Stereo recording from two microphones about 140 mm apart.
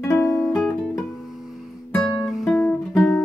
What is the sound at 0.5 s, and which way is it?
Music, 5° left (ahead or behind).